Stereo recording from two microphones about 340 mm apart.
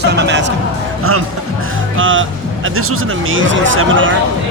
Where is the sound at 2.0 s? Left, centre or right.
Right.